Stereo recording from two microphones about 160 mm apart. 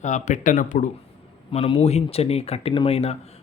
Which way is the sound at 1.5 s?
40° left (ahead or behind).